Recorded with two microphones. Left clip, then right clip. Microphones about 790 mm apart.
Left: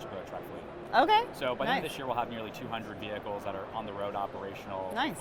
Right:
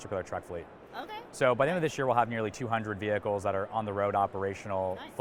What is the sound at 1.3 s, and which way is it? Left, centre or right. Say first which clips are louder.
Speech: right 4 dB; right.